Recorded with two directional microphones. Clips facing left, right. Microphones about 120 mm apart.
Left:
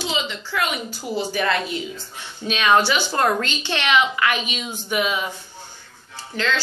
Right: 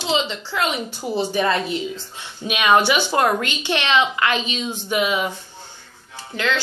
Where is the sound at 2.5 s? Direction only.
15° right (ahead or behind).